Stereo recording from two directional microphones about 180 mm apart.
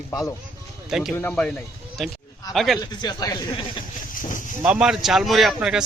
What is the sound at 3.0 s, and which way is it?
Speech, 20° left (ahead or behind).